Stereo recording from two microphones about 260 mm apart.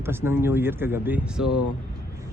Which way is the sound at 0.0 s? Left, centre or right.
Centre.